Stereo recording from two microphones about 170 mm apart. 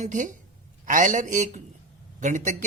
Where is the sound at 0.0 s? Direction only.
50° right (ahead or behind).